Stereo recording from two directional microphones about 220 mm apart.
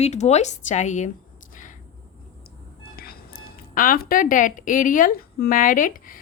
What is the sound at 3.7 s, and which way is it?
A woman's voice, 40° left (ahead or behind).